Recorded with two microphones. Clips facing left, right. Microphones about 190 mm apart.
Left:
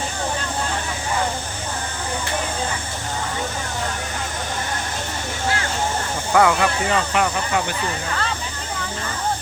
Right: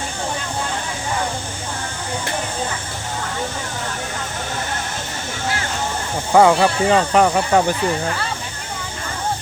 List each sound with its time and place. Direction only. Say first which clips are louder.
6.3 s speech: right 4 dB; 30° right (ahead or behind)